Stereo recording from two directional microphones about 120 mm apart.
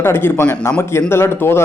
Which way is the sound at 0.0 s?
20° left (ahead or behind).